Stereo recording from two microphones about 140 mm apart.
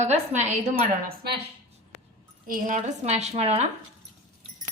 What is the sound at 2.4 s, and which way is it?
A woman's voice, 70° right (ahead or behind).